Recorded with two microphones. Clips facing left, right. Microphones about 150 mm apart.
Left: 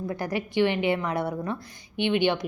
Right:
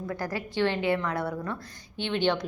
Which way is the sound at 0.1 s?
20° left (ahead or behind).